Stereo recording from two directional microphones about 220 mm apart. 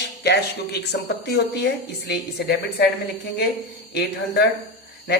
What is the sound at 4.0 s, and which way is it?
Speech, 45° left (ahead or behind).